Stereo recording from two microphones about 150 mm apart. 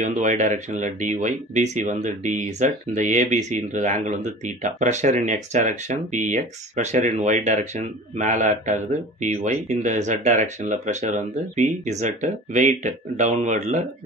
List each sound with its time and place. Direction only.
0.0 s speech: 55° right (ahead or behind)